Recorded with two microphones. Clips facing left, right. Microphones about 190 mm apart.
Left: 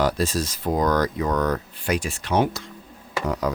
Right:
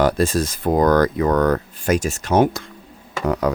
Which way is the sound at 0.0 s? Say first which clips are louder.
Right 5 dB; 55° right (ahead or behind).